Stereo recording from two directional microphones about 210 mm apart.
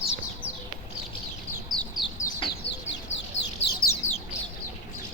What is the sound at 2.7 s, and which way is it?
Bird, 60° left (ahead or behind).